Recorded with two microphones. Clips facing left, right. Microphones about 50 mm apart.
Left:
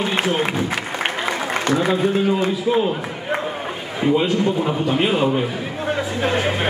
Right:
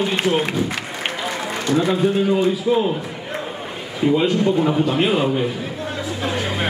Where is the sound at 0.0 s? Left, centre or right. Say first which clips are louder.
Right 1 dB; centre.